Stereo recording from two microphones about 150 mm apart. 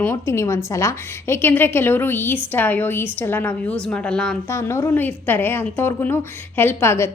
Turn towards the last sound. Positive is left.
turn(degrees=15)  # may be behind; listen again after turning